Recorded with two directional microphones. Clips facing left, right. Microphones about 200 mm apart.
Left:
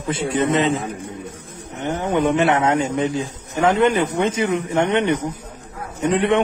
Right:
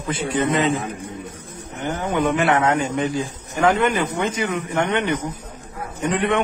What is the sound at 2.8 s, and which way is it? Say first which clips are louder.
Speech: left 1 dB; 25° left (ahead or behind).